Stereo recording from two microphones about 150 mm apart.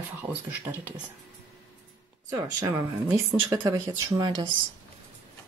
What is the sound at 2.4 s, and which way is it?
Speech, 20° right (ahead or behind).